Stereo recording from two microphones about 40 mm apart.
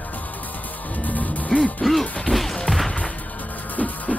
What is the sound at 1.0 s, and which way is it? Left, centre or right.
Music, left.